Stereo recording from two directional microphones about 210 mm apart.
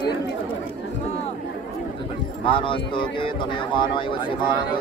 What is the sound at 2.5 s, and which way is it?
Speech, 25° left (ahead or behind).